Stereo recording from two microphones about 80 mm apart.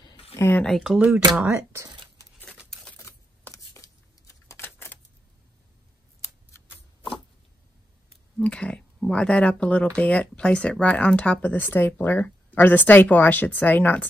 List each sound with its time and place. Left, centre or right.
0.4 s speech: left
0.9 s speech: centre
1.5 s speech: right
2.7 s a sound: centre
3.1 s a sound: left
4.5 s typewriter: left
6.2 s shuffling cards: left
8.4 s speech: centre